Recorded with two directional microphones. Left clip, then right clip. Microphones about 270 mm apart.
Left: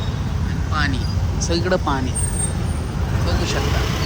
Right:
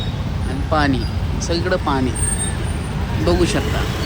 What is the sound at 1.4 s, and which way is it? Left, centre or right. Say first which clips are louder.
Speech: even; centre.